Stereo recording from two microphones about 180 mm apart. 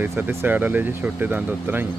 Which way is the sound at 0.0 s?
10° right (ahead or behind).